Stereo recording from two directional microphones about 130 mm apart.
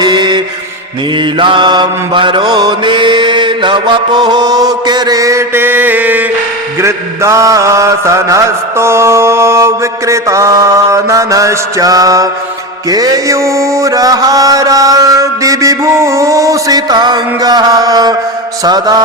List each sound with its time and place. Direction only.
0.0 s mantra: 35° right (ahead or behind)